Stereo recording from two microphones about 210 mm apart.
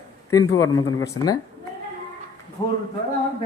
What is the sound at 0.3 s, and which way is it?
Speech, 15° left (ahead or behind).